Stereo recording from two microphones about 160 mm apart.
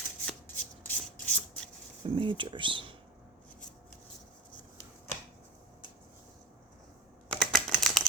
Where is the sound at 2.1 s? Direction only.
30° right (ahead or behind).